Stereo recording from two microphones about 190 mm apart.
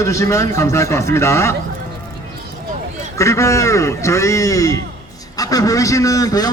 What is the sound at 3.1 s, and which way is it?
A man's voice, 15° left (ahead or behind).